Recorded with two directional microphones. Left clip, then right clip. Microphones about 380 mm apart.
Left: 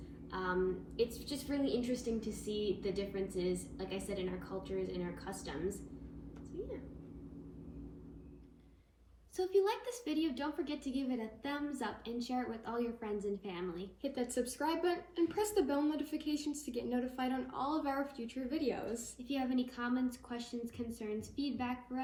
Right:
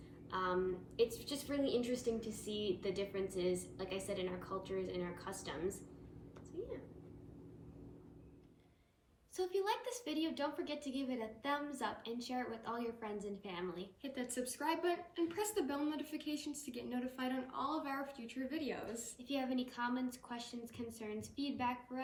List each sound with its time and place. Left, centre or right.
0.3 s a sound: centre
0.9 s a woman's voice: centre
9.3 s a woman's voice: centre